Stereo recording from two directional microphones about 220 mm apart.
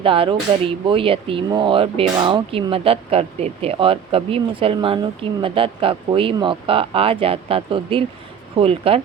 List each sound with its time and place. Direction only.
0.0 s speech: 25° right (ahead or behind)